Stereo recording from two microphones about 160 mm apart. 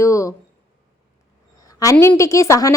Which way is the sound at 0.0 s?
20° left (ahead or behind).